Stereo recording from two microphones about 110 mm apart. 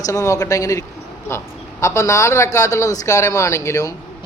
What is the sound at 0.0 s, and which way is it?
Speech, 30° left (ahead or behind).